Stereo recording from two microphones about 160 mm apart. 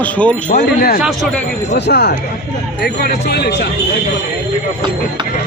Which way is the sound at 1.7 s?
90° left.